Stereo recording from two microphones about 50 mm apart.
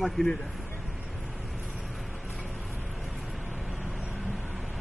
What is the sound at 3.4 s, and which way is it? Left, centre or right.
Vehicle, right.